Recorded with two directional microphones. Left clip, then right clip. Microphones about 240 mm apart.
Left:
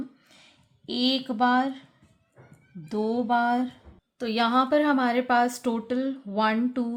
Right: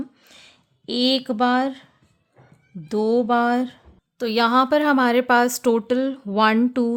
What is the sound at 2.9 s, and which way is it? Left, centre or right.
Speech, right.